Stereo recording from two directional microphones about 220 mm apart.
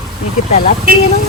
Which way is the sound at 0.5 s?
35° left (ahead or behind).